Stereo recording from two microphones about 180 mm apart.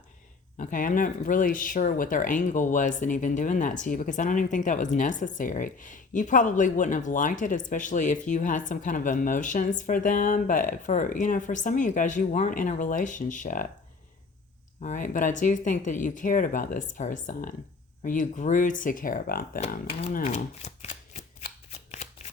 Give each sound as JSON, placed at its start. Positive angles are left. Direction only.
{"t": 0.5, "sound": "speech", "side_deg": 45}
{"t": 14.8, "sound": "speech", "side_deg": 45}
{"t": 19.9, "sound": "speech", "side_deg": 35}
{"t": 21.4, "sound": "shuffling cards", "side_deg": 40}